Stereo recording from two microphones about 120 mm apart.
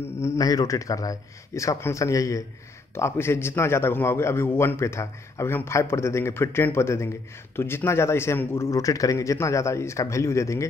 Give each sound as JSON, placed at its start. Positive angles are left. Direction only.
{"t": 0.2, "sound": "a man's voice", "side_deg": 25}